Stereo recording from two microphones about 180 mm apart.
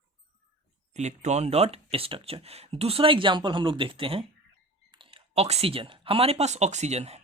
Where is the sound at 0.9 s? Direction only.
40° right (ahead or behind).